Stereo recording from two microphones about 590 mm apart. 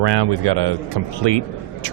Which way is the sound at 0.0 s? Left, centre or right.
Right.